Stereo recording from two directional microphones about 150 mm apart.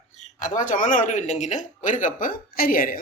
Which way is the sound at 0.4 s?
60° left (ahead or behind).